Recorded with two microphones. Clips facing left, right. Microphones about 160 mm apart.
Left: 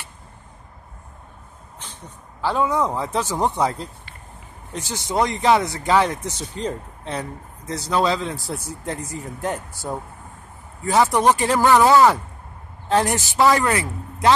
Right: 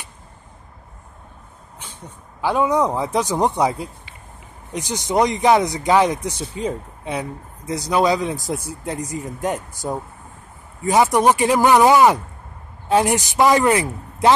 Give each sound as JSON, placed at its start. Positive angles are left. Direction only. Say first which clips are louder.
{"t": 1.8, "sound": "speech", "louder": "right 1 dB", "side_deg": -10}